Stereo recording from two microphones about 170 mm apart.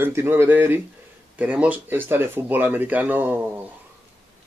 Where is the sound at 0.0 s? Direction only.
15° right (ahead or behind).